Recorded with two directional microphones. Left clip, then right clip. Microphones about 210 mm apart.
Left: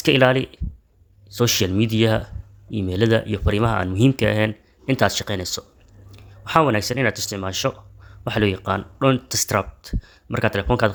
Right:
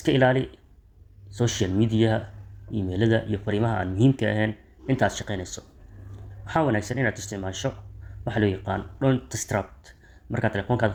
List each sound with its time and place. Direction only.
0.0 s speech: 40° left (ahead or behind)